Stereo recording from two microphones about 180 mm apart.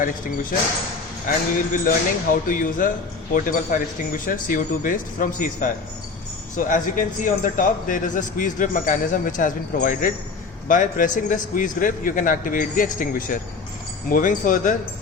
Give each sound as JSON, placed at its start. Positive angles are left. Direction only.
{"t": 1.7, "sound": "a man's voice", "side_deg": 50}